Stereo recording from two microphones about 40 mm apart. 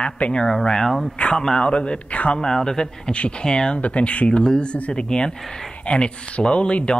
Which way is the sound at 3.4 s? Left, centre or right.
Centre.